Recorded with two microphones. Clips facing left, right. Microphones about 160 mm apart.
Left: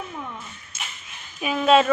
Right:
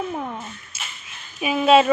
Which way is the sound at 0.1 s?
50° right (ahead or behind).